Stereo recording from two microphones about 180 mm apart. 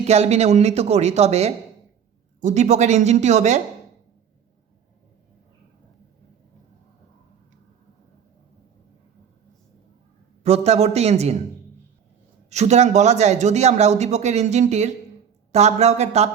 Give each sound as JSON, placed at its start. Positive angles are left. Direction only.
{"t": 0.0, "sound": "a man's voice", "side_deg": -35}
{"t": 10.4, "sound": "a man's voice", "side_deg": -35}
{"t": 12.5, "sound": "a man's voice", "side_deg": -40}